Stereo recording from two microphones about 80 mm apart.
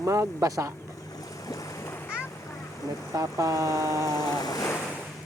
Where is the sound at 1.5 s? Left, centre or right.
Left.